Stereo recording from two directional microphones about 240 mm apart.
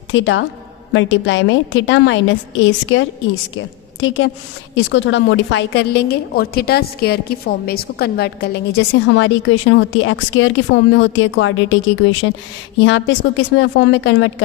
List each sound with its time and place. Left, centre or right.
0.1 s a woman's voice: left
12.8 s a woman's voice: left